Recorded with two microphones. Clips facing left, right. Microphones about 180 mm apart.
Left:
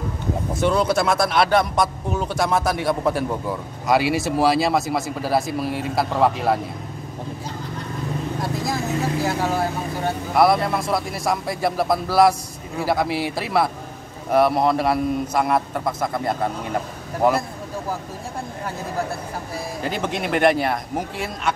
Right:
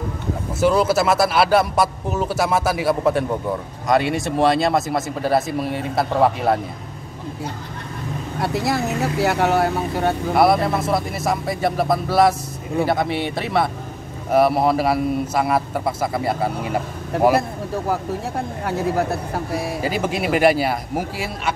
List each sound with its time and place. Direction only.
0.6 s speech: 5° right (ahead or behind)
8.4 s speech: 70° right (ahead or behind)
10.3 s speech: centre (ahead or behind)
17.1 s speech: 65° right (ahead or behind)
19.8 s speech: 5° right (ahead or behind)